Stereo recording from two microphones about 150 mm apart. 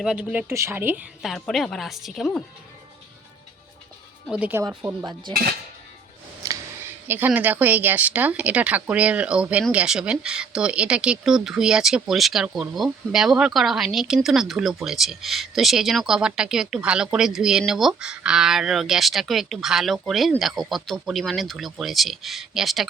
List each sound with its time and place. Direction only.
0.0 s speech: 5° right (ahead or behind)
1.2 s speech: centre (ahead or behind)
4.3 s speech: 10° right (ahead or behind)
5.3 s dishes: 80° right
6.4 s a sound: 25° right (ahead or behind)
7.1 s speech: 10° right (ahead or behind)